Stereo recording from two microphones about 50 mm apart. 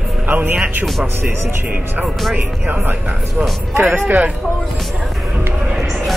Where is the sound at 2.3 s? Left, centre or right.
Right.